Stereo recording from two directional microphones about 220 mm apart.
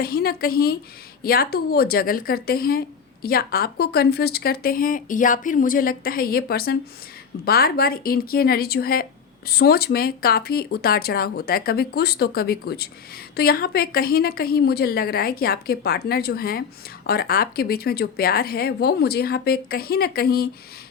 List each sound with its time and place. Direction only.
0.0 s speech: 45° left (ahead or behind)